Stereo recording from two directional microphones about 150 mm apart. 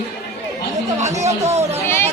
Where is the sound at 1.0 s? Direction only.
45° right (ahead or behind).